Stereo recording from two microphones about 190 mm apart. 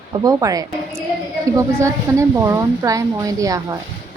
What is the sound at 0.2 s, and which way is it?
A woman's voice, 20° right (ahead or behind).